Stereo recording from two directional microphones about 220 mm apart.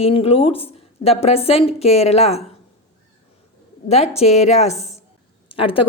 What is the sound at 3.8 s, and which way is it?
A woman's voice, 30° left (ahead or behind).